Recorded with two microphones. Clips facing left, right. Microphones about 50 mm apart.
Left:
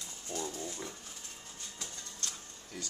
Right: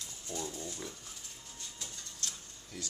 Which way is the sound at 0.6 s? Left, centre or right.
Centre.